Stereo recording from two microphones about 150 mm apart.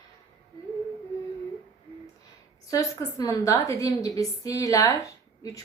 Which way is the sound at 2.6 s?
20° left (ahead or behind).